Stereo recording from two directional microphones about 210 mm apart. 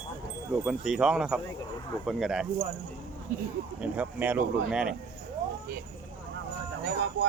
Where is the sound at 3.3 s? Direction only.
45° right (ahead or behind).